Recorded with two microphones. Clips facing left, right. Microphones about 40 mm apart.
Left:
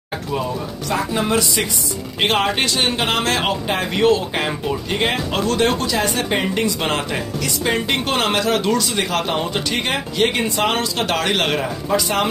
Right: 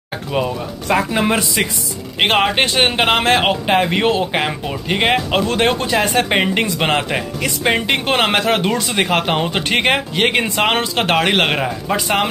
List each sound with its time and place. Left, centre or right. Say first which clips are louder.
0.3 s a man's voice: right 4 dB; right